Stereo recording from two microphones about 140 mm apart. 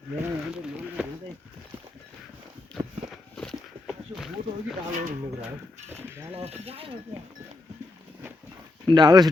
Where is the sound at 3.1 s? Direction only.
5° left (ahead or behind).